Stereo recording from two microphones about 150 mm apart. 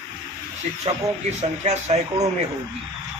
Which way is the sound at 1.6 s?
45° right (ahead or behind).